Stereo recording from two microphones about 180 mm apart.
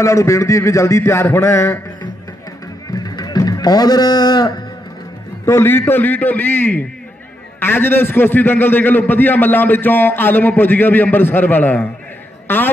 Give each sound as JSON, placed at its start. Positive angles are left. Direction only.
{"t": 0.0, "sound": "a man's voice", "side_deg": 15}
{"t": 2.9, "sound": "music", "side_deg": 20}
{"t": 5.4, "sound": "a man's voice", "side_deg": 15}